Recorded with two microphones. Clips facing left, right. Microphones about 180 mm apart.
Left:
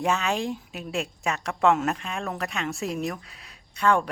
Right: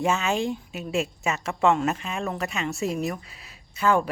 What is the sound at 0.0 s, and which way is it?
Speech, centre (ahead or behind).